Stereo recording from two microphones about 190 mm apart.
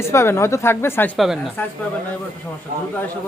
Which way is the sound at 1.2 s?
Centre (ahead or behind).